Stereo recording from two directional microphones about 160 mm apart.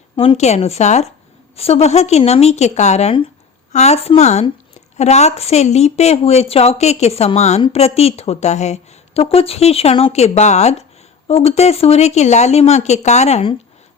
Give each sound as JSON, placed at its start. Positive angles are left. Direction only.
{"t": 0.2, "sound": "speech", "side_deg": 40}